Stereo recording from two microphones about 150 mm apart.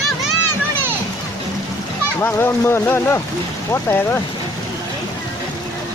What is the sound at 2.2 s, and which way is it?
Speech, 15° left (ahead or behind).